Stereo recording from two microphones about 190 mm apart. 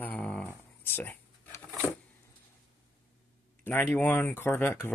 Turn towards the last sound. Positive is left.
turn(degrees=10)  # may be behind; listen again after turning